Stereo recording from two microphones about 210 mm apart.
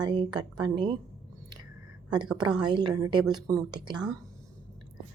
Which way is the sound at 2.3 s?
20° right (ahead or behind).